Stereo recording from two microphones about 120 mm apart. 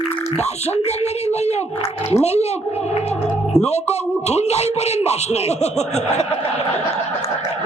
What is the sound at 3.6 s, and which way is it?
Speech, 65° left (ahead or behind).